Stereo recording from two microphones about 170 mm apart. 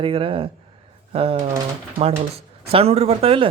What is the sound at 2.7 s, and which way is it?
Speech, 35° right (ahead or behind).